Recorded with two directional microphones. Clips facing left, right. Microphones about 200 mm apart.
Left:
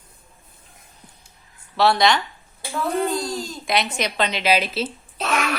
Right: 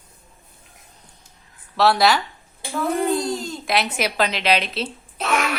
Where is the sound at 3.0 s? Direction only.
20° right (ahead or behind).